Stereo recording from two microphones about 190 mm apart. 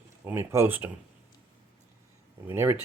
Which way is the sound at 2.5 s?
10° right (ahead or behind).